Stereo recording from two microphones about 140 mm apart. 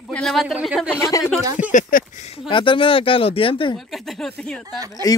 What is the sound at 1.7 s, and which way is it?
Speech, 65° left (ahead or behind).